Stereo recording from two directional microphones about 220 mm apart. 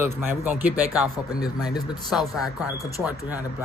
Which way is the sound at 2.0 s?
Centre (ahead or behind).